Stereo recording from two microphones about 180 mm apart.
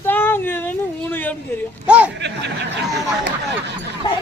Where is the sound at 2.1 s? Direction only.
75° right (ahead or behind).